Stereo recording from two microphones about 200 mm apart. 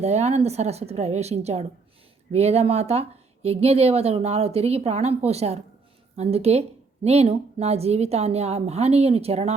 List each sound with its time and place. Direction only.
0.0 s a woman's voice: 35° right (ahead or behind)